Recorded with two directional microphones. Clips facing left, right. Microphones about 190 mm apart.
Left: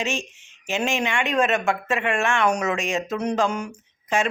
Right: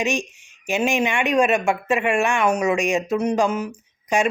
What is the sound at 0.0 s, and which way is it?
Speech, 15° right (ahead or behind).